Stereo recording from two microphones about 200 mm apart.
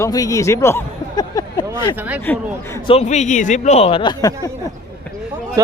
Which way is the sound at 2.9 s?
35° left (ahead or behind).